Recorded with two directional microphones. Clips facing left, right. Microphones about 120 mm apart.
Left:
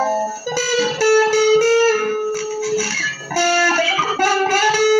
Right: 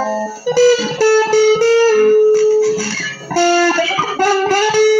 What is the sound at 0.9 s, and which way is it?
Music, 25° right (ahead or behind).